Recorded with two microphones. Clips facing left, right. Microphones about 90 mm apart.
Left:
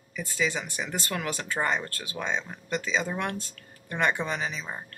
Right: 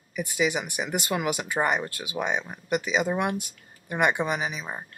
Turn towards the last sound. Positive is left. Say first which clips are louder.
# right 2 dB
turn(degrees=-15)  # may be behind; listen again after turning